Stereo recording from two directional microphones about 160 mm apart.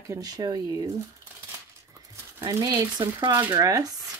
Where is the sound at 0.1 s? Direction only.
25° right (ahead or behind).